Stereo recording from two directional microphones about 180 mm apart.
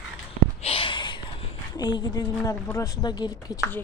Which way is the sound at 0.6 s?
30° left (ahead or behind).